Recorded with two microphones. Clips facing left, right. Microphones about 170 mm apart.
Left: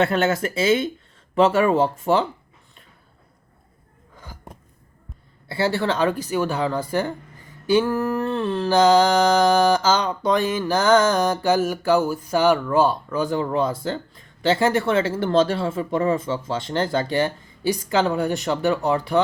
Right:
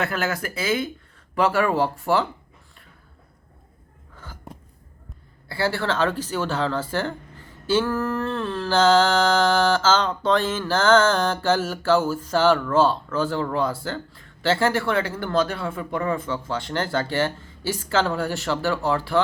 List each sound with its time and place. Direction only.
0.0 s speech: 25° left (ahead or behind)
4.1 s gasp: 15° left (ahead or behind)
5.5 s speech: 20° left (ahead or behind)